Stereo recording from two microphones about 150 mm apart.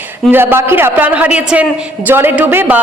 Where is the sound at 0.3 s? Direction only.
15° right (ahead or behind).